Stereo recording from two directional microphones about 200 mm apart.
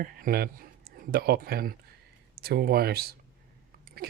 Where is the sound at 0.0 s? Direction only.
45° right (ahead or behind).